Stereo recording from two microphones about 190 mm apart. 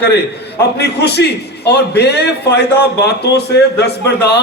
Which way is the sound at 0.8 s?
60° left (ahead or behind).